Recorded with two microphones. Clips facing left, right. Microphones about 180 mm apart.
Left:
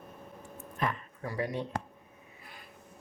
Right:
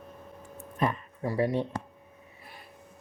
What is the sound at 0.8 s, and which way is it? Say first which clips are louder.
Speech: right 5 dB; 25° right (ahead or behind).